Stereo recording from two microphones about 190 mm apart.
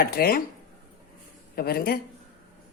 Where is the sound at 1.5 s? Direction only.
55° left (ahead or behind).